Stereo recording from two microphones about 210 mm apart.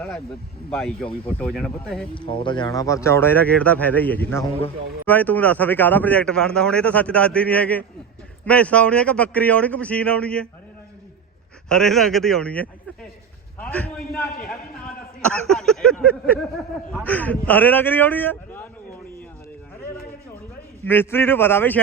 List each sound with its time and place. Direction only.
0.7 s a man's voice: centre (ahead or behind)
2.1 s speech: 25° left (ahead or behind); by 10.5 s 5° left (ahead or behind)
11.7 s a man's voice: centre (ahead or behind)
15.2 s a man's voice: 5° left (ahead or behind)
20.8 s speech: 10° left (ahead or behind)